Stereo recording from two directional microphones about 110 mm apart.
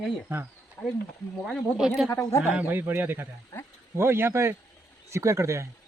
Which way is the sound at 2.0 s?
25° left (ahead or behind).